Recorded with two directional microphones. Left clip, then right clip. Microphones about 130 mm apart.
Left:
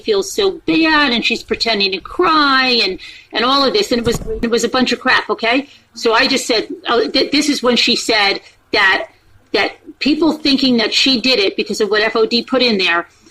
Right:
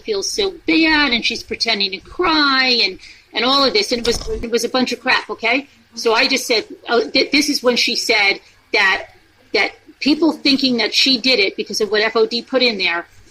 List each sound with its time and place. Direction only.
0.1 s a woman's voice: 15° left (ahead or behind)
9.5 s a sound: 15° left (ahead or behind)
10.2 s speech: 20° left (ahead or behind)